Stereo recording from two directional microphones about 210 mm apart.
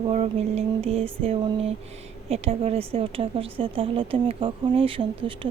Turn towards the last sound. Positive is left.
turn(degrees=-25)  # may be behind; listen again after turning